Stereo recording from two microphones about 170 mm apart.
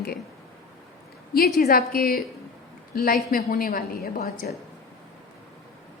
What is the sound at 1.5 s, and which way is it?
A woman's voice, 60° left (ahead or behind).